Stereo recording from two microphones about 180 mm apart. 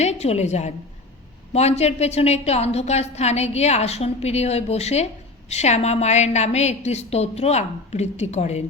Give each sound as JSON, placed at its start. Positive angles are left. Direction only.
{"t": 0.0, "sound": "a woman's voice", "side_deg": 35}